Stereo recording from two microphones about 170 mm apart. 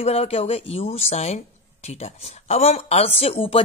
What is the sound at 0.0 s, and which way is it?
Speech, 35° left (ahead or behind).